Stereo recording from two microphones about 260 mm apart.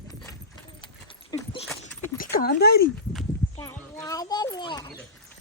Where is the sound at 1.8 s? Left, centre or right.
Left.